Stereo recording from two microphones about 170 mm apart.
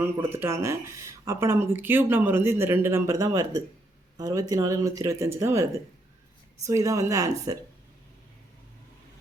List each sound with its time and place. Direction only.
0.0 s speech: 15° right (ahead or behind)